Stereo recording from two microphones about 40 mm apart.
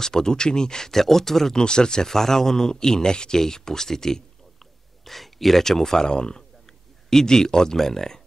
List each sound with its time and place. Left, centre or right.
0.0 s a man's voice: centre